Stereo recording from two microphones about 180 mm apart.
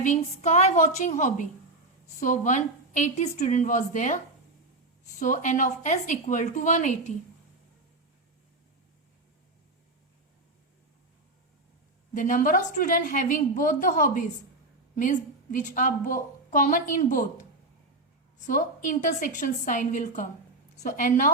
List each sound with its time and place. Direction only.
0.0 s a woman's voice: 40° left (ahead or behind)
5.2 s a woman's voice: 45° left (ahead or behind)
12.1 s a woman's voice: 45° left (ahead or behind)
18.4 s a woman's voice: 45° left (ahead or behind)